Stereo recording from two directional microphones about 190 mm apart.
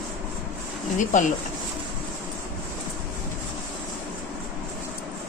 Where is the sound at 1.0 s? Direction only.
40° left (ahead or behind).